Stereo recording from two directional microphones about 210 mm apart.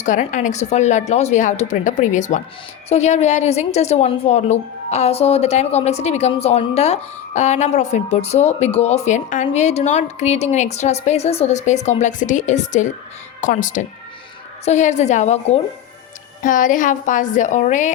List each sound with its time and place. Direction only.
0.0 s a woman's voice: 35° left (ahead or behind)